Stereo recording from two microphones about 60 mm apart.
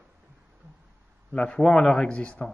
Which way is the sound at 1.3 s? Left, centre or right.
Centre.